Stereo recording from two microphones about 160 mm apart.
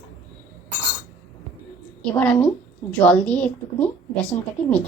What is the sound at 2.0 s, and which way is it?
A woman's voice, 5° left (ahead or behind).